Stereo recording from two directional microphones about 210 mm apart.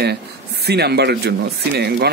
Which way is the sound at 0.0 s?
50° right (ahead or behind).